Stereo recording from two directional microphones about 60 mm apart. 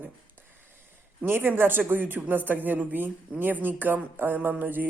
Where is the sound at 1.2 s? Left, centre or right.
Right.